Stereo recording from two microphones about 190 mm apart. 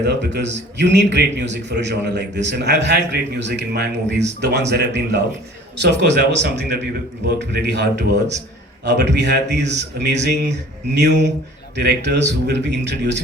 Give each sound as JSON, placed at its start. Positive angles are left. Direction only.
{"t": 0.0, "sound": "a man's voice", "side_deg": -60}